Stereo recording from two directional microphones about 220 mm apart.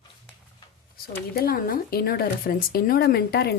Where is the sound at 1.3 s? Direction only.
40° left (ahead or behind).